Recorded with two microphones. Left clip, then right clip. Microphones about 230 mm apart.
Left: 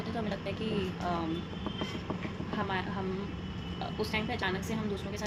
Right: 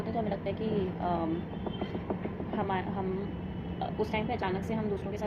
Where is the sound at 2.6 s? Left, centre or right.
Left.